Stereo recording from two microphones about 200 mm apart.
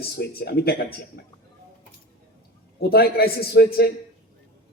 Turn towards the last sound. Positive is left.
turn(degrees=50)  # may be behind; listen again after turning